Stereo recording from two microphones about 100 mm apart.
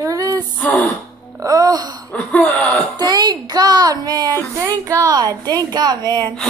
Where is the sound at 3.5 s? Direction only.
45° right (ahead or behind).